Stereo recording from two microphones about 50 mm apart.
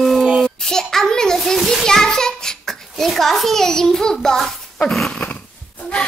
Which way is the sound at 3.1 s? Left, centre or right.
Centre.